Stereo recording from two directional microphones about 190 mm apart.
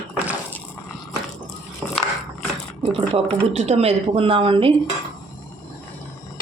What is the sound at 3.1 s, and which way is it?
Speech, 30° right (ahead or behind).